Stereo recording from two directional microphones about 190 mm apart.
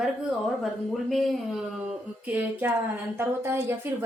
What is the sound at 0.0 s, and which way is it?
A woman's voice, centre (ahead or behind).